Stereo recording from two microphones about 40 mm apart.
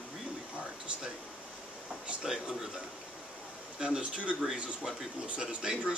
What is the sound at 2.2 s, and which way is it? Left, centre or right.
Speech, centre.